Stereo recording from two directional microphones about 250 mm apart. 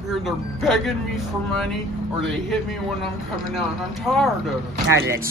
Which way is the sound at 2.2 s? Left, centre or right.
Centre.